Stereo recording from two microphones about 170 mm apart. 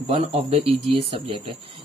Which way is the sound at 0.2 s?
40° right (ahead or behind).